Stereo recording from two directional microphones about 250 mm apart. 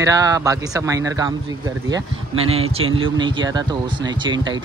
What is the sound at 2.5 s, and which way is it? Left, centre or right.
Speech, right.